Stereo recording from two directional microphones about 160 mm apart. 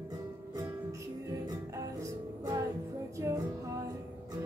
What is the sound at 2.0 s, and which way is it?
Music, 20° right (ahead or behind).